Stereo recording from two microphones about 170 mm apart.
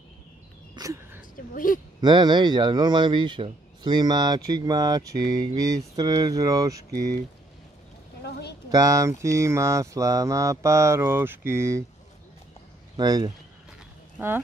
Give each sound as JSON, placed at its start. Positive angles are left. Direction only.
{"t": 0.7, "sound": "a sound", "side_deg": -20}
{"t": 1.5, "sound": "speech", "side_deg": 55}
{"t": 2.0, "sound": "speech", "side_deg": -25}
{"t": 8.6, "sound": "a sound", "side_deg": -20}
{"t": 12.9, "sound": "speech", "side_deg": -25}
{"t": 14.1, "sound": "speech", "side_deg": -10}